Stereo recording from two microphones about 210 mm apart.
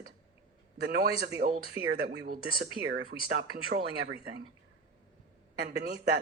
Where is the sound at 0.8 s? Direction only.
45° right (ahead or behind).